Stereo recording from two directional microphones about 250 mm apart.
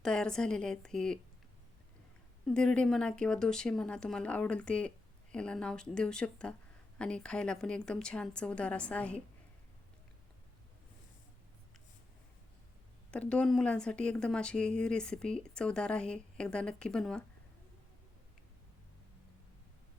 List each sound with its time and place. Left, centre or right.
0.0 s speech: centre
2.5 s speech: centre
13.1 s speech: centre